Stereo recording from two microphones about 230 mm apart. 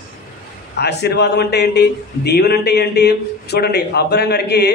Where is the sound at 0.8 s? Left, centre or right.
Left.